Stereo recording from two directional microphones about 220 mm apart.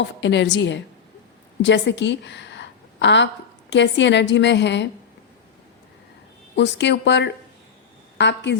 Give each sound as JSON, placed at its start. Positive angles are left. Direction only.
{"t": 0.0, "sound": "a woman's voice", "side_deg": 55}
{"t": 6.6, "sound": "a woman's voice", "side_deg": 55}